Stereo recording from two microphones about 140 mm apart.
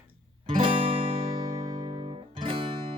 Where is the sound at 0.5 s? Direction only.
40° right (ahead or behind).